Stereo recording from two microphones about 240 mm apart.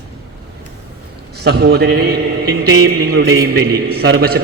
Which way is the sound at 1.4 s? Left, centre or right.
Right.